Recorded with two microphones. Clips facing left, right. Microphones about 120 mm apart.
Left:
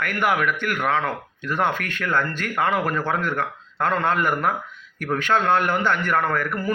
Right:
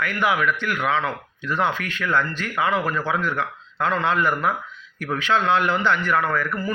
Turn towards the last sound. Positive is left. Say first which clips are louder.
# even
turn(degrees=55)  # may be behind; listen again after turning